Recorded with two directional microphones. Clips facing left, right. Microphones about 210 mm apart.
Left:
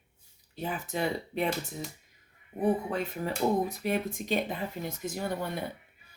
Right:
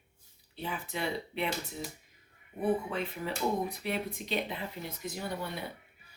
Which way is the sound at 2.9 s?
45° left (ahead or behind).